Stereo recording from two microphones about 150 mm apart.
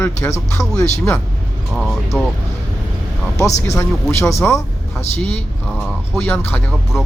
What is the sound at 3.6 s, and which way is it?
Speech, 20° left (ahead or behind).